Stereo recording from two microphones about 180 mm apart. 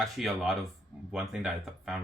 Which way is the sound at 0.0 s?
Centre (ahead or behind).